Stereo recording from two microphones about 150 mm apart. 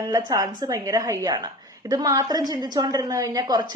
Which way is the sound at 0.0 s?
25° right (ahead or behind).